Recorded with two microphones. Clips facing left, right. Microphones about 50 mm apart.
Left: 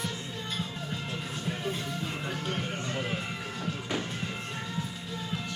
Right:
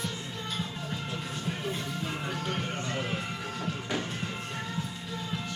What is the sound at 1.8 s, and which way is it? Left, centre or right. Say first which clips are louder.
Music: even; centre.